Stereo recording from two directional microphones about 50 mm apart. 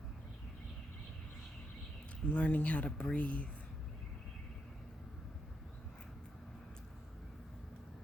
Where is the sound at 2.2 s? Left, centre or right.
Left.